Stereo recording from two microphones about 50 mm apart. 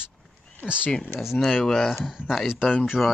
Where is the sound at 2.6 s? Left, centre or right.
Left.